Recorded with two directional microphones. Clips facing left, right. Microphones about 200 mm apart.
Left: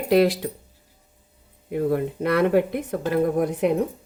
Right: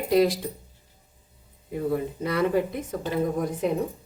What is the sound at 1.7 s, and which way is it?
Speech, 65° left (ahead or behind).